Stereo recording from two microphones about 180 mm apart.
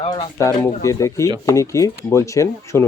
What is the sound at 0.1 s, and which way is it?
Speech, 20° left (ahead or behind).